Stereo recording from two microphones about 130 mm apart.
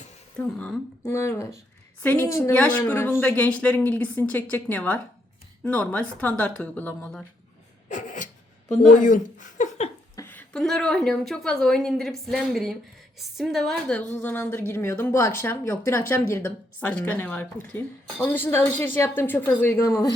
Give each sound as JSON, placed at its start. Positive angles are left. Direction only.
{"t": 0.3, "sound": "a woman's voice", "side_deg": 5}
{"t": 1.0, "sound": "a woman's voice", "side_deg": 20}
{"t": 7.9, "sound": "a sound", "side_deg": 70}
{"t": 8.9, "sound": "speech", "side_deg": 90}
{"t": 10.2, "sound": "a sound", "side_deg": 10}
{"t": 10.6, "sound": "a woman's voice", "side_deg": 5}
{"t": 14.1, "sound": "a woman's voice", "side_deg": 15}